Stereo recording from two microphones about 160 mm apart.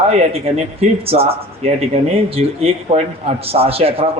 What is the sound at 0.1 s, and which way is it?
A man's voice, 40° right (ahead or behind).